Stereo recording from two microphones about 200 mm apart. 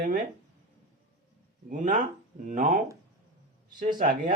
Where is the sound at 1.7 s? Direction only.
40° right (ahead or behind).